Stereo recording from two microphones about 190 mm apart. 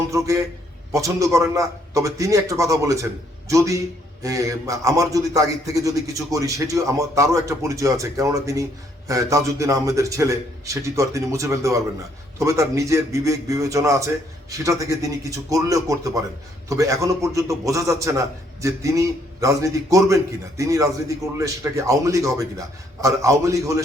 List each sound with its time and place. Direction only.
0.1 s a man's voice: 15° right (ahead or behind)